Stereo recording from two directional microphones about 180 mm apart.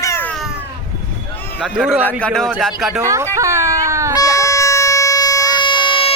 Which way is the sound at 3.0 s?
15° right (ahead or behind).